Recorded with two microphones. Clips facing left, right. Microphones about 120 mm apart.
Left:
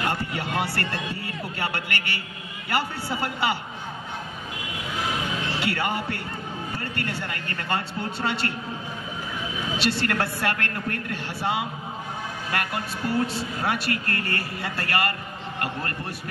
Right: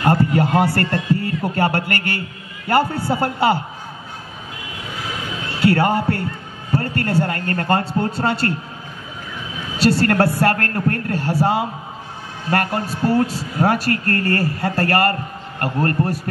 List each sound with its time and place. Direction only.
0.0 s a sound: 40° right (ahead or behind)
0.7 s a man's voice: 45° right (ahead or behind)
5.6 s a woman's voice: 40° right (ahead or behind)
9.8 s a woman's voice: 40° right (ahead or behind)